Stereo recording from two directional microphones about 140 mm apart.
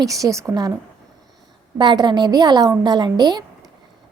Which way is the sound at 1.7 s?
30° right (ahead or behind).